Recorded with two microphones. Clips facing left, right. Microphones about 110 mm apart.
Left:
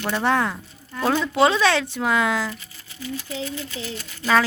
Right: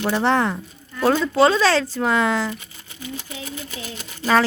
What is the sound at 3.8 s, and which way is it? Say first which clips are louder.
Speech: left 2 dB; 40° right (ahead or behind).